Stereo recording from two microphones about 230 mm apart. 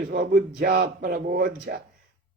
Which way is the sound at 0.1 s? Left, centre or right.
Right.